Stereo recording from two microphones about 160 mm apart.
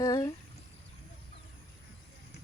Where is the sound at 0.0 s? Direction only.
25° left (ahead or behind).